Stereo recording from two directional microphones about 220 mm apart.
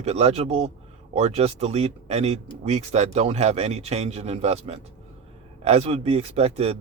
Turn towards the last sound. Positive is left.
turn(degrees=-30)  # may be behind; listen again after turning